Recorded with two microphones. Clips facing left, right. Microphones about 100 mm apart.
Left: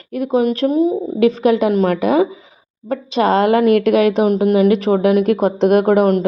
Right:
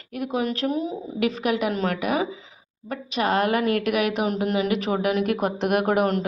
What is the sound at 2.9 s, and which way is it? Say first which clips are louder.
Speech: left 8 dB; 30° left (ahead or behind).